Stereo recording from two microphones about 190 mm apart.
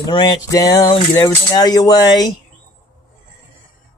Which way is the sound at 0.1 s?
25° left (ahead or behind).